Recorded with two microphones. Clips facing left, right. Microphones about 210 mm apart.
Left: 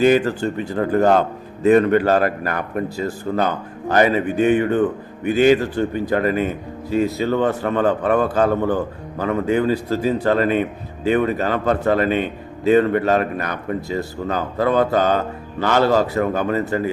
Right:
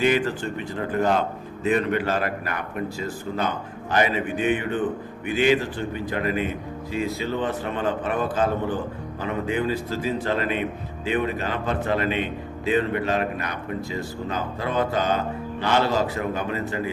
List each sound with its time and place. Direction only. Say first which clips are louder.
0.0 s a man's voice: left 6 dB; 40° left (ahead or behind)
8.4 s a man's voice: left 6 dB; 60° left (ahead or behind)
9.1 s a man's voice: left 7 dB; 40° left (ahead or behind)